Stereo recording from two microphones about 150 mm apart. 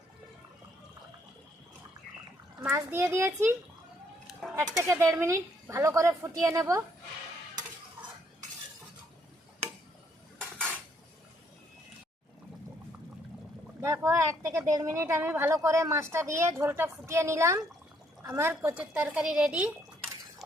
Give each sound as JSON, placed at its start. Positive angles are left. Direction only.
{"t": 2.6, "sound": "speech", "side_deg": -15}
{"t": 4.5, "sound": "a woman's voice", "side_deg": -20}
{"t": 13.8, "sound": "a woman's voice", "side_deg": -20}